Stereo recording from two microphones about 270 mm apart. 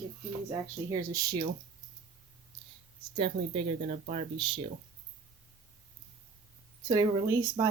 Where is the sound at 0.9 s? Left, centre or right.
Centre.